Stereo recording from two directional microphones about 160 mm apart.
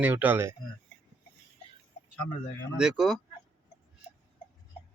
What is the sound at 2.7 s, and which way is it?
Speech, 5° right (ahead or behind).